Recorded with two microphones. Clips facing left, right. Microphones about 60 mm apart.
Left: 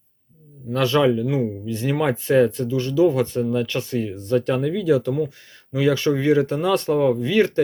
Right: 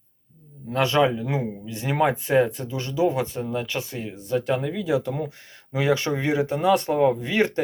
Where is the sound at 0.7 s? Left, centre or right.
Right.